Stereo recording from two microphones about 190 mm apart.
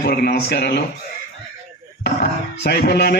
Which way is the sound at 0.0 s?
55° left (ahead or behind).